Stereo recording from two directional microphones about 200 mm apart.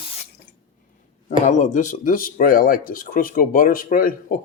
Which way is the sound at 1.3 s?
40° left (ahead or behind).